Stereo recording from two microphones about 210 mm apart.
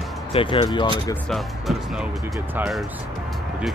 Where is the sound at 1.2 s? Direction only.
Centre (ahead or behind).